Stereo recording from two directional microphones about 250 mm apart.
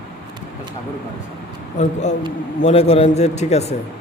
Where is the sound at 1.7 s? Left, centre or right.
Left.